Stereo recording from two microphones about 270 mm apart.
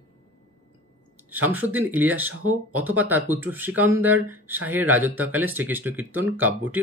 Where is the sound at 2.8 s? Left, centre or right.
Centre.